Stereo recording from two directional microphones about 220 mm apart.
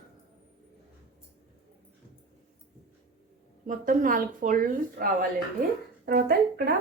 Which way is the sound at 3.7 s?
40° right (ahead or behind).